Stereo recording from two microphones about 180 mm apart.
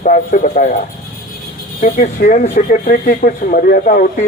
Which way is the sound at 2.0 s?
50° left (ahead or behind).